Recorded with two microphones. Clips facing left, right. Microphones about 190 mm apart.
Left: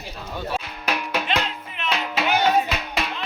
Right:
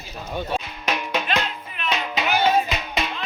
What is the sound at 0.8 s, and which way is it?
Music, 5° left (ahead or behind).